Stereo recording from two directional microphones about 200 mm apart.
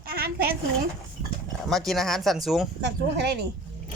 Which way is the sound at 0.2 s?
50° right (ahead or behind).